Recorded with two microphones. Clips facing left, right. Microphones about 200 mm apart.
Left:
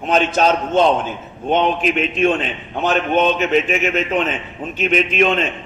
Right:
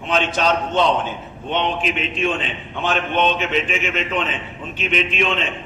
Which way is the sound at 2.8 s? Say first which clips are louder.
Left 4 dB; 45° left (ahead or behind).